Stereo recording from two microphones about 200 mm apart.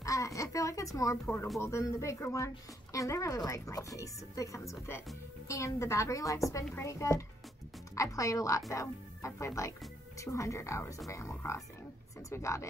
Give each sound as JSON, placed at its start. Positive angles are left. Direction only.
{"t": 0.0, "sound": "a woman's voice", "side_deg": 15}